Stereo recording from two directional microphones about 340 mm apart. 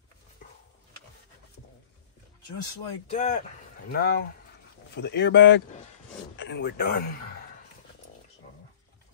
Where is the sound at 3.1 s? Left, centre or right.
Left.